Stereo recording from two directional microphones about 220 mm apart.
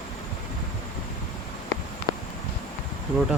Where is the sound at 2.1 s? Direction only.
20° right (ahead or behind).